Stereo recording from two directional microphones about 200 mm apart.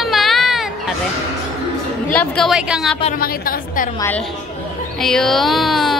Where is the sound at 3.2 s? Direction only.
45° left (ahead or behind).